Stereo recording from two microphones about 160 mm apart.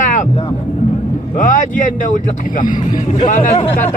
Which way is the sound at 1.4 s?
55° left (ahead or behind).